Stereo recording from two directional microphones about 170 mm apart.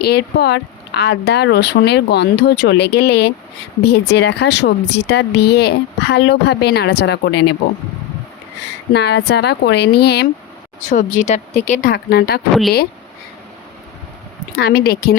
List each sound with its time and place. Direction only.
0.0 s speech: 70° left (ahead or behind)
8.9 s speech: 80° left
10.8 s speech: 45° left (ahead or behind)
11.9 s speech: 65° left (ahead or behind)
14.5 s speech: 65° left (ahead or behind)